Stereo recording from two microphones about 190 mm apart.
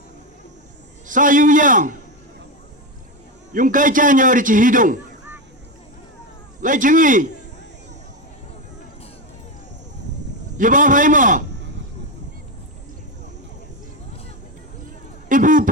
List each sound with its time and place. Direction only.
1.0 s a man's voice: 45° right (ahead or behind)
3.5 s a man's voice: 45° right (ahead or behind)
6.6 s a man's voice: 45° right (ahead or behind)
10.6 s a man's voice: 45° right (ahead or behind)
15.3 s a sound: 45° right (ahead or behind)